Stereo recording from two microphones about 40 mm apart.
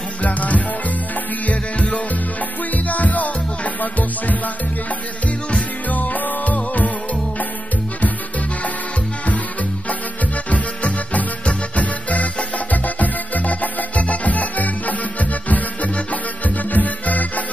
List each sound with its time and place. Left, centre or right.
0.2 s music: left
5.5 s music: left
10.5 s music: left